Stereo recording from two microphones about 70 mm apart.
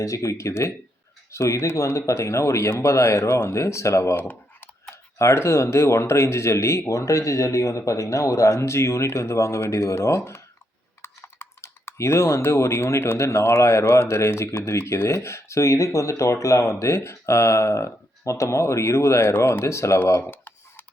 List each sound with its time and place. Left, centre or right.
0.0 s speech: left
4.2 s computer keyboard: left
5.1 s speech: left
20.2 s tick-tock: left